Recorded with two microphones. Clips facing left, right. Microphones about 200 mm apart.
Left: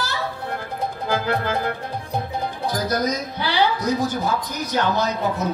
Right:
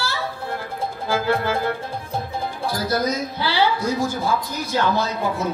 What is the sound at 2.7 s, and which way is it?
Speech, 20° left (ahead or behind).